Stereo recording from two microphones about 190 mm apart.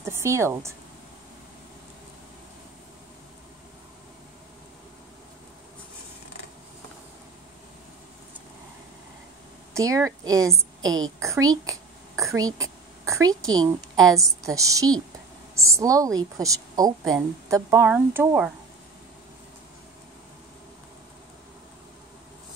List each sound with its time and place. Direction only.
0.0 s speech: 15° right (ahead or behind)
9.8 s a woman's voice: 15° right (ahead or behind)